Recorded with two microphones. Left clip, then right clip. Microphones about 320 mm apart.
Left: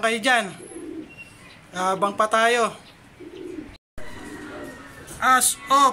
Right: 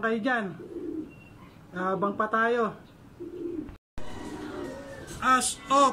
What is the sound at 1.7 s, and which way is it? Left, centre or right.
Speech, centre.